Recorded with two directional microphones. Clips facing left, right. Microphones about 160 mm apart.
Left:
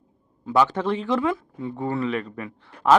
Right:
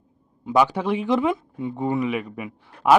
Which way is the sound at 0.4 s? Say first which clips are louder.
Right 1 dB; 10° right (ahead or behind).